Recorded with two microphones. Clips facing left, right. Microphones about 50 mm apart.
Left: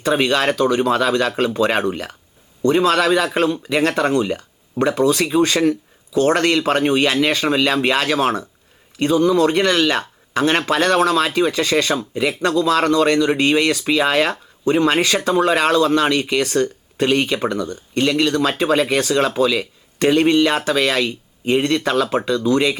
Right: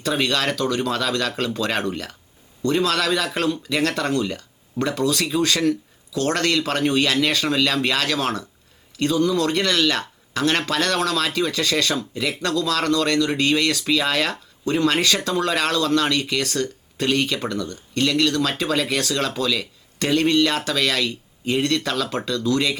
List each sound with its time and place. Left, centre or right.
0.0 s speech: left